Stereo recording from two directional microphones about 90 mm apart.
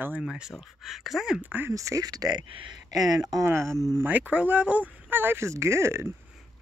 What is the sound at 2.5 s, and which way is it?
Speech, 80° right.